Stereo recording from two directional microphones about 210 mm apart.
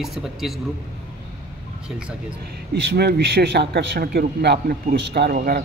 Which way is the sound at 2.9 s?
50° right (ahead or behind).